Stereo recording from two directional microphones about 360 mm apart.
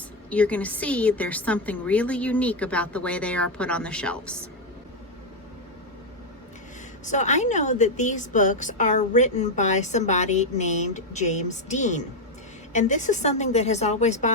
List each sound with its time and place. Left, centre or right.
0.3 s a woman's voice: centre
7.0 s a woman's voice: centre